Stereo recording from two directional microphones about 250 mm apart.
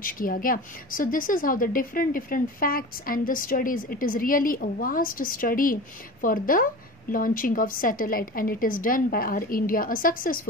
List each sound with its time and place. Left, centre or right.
0.0 s speech: left